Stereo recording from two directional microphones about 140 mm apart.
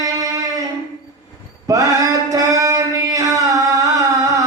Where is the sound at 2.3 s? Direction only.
25° right (ahead or behind).